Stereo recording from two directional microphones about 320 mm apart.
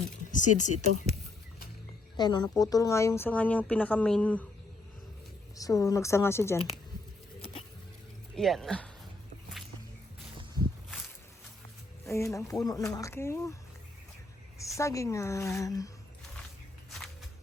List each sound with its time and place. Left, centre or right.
0.3 s speech: left
2.1 s speech: centre
5.5 s speech: centre
8.4 s speech: centre
12.0 s speech: centre
14.6 s speech: centre